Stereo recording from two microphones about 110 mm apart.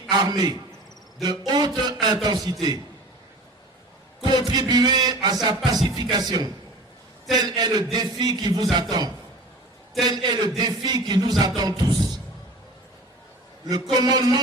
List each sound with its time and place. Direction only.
0.1 s speech: 40° right (ahead or behind)
4.2 s speech: 40° right (ahead or behind)
13.9 s speech: 35° right (ahead or behind)